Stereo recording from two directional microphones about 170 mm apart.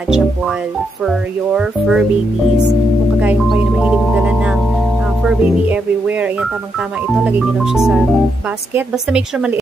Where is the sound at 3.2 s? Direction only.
5° right (ahead or behind).